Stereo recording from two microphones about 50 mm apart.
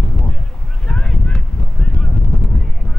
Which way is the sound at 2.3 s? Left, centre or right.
Centre.